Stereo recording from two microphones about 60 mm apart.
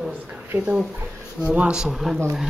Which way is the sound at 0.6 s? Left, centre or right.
Centre.